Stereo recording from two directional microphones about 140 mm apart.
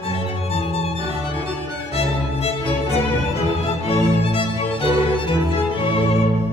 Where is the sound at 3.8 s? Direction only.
40° left (ahead or behind).